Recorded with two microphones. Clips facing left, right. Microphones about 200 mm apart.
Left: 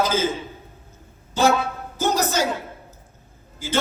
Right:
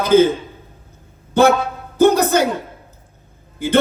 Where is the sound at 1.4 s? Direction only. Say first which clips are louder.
Right 6 dB; 60° right (ahead or behind).